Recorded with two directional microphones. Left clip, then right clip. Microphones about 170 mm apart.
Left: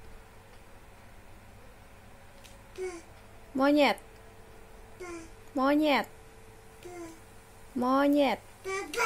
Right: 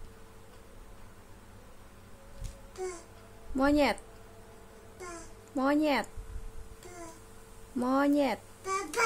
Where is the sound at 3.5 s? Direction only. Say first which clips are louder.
Left 2 dB; centre (ahead or behind).